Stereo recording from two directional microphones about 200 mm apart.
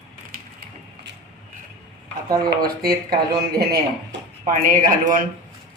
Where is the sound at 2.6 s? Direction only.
50° right (ahead or behind).